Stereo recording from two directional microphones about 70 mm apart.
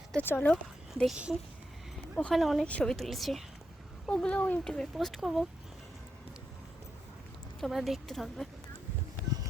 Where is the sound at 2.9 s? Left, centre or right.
Centre.